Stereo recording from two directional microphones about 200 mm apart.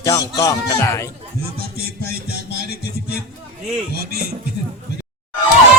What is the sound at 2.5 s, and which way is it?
Music, 55° left (ahead or behind).